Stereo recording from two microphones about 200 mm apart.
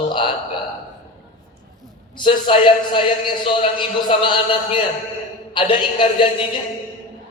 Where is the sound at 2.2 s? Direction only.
25° left (ahead or behind).